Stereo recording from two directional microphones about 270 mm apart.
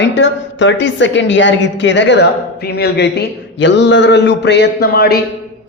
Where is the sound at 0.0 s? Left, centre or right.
Left.